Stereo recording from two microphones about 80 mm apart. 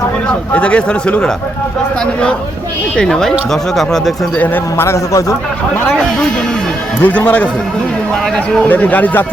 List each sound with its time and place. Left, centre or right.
0.5 s speech: centre
2.9 s speech: centre
4.4 s a man's voice: left
5.9 s speech: centre
7.0 s speech: centre
8.6 s speech: left